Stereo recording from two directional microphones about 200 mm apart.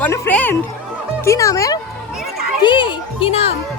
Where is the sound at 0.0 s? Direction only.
10° left (ahead or behind).